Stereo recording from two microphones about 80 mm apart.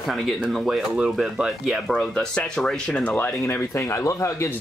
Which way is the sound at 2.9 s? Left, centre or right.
Centre.